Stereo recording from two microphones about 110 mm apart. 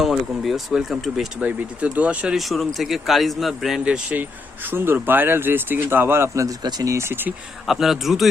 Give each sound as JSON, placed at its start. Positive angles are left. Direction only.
{"t": 0.0, "sound": "speech", "side_deg": 0}
{"t": 1.4, "sound": "speech", "side_deg": -15}
{"t": 6.6, "sound": "speech", "side_deg": -40}
{"t": 7.7, "sound": "speech", "side_deg": 0}